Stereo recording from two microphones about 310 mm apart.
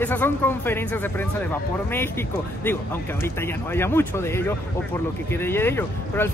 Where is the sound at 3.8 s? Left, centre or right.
Centre.